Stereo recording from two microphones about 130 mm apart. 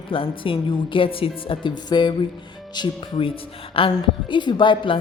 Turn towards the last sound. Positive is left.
turn(degrees=40)  # may be behind; listen again after turning